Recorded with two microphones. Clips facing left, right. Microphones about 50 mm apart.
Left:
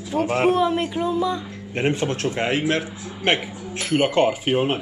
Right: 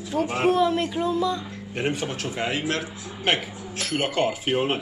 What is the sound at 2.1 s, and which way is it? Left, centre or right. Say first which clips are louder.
Speech: left 5 dB; left.